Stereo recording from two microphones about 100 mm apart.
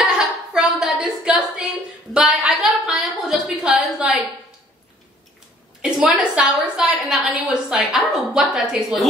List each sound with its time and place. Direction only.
0.0 s a sound: 5° right (ahead or behind)
2.1 s a woman's voice: 10° right (ahead or behind)
5.8 s a woman's voice: 10° right (ahead or behind)